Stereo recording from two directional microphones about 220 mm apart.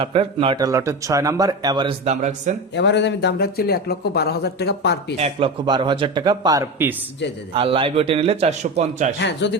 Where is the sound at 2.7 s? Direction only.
50° left (ahead or behind).